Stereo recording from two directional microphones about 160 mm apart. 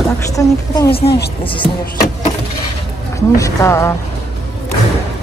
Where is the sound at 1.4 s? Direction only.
30° left (ahead or behind).